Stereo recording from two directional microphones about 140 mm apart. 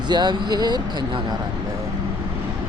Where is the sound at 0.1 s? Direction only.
30° right (ahead or behind).